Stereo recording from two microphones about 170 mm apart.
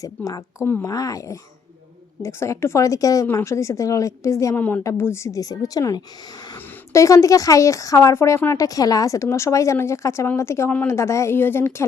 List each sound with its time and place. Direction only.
0.3 s a woman's voice: 15° left (ahead or behind)